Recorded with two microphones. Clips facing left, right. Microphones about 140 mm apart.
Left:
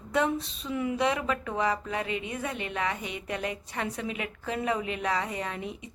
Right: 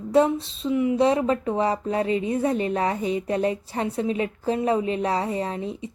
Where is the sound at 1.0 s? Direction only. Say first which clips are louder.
Right 8 dB; 30° right (ahead or behind).